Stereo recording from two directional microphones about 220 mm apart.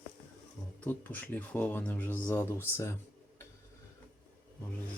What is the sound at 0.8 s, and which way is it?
Speech, 10° left (ahead or behind).